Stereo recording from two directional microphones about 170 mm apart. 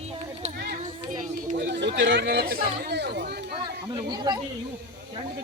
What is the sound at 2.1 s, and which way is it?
Speech, 70° right (ahead or behind).